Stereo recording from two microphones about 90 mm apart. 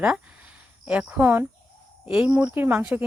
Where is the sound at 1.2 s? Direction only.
25° right (ahead or behind).